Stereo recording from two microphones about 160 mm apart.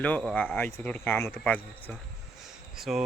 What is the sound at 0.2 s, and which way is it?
Speech, 5° left (ahead or behind).